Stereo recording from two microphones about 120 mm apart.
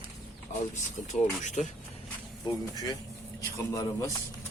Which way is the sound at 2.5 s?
30° left (ahead or behind).